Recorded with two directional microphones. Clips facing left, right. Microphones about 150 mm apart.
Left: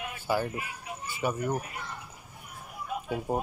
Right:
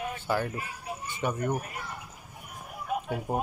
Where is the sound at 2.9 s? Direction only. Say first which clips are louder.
Right 4 dB; 55° right (ahead or behind).